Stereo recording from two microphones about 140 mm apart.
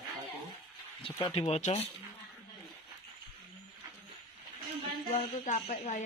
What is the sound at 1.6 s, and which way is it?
Speech, 55° left (ahead or behind).